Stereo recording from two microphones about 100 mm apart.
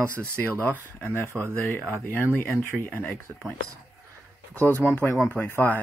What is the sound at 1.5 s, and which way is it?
Speech, 15° left (ahead or behind).